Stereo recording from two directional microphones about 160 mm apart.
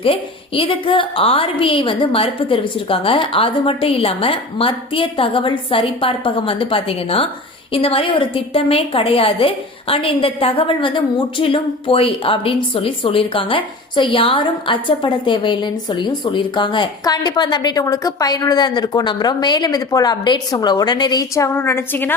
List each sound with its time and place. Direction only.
0.0 s a woman's voice: 35° left (ahead or behind); by 22.1 s 15° left (ahead or behind)